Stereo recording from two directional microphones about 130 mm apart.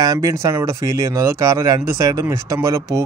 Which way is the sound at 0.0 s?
25° right (ahead or behind).